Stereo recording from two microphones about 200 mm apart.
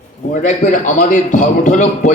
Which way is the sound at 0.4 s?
40° left (ahead or behind).